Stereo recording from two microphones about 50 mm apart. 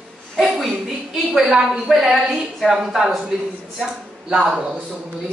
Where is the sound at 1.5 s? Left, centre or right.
Centre.